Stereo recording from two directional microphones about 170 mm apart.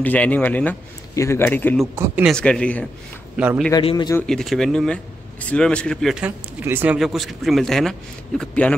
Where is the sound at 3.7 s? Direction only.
25° left (ahead or behind).